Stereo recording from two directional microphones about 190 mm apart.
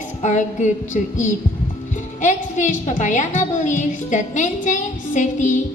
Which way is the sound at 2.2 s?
40° left (ahead or behind).